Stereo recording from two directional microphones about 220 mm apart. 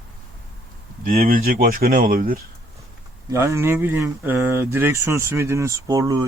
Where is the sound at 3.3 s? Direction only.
15° right (ahead or behind).